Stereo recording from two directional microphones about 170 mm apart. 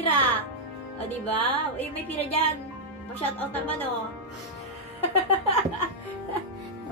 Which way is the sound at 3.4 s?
10° left (ahead or behind).